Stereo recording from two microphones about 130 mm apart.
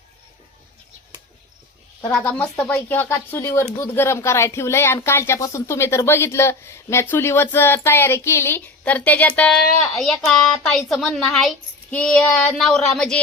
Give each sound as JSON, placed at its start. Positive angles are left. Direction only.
{"t": 2.0, "sound": "speech", "side_deg": 15}